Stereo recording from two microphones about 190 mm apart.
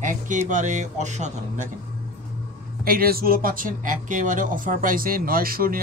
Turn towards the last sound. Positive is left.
turn(degrees=-50)  # may be behind; listen again after turning